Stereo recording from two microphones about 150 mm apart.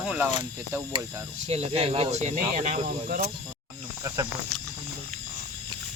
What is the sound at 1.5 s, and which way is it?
Speech, 45° right (ahead or behind).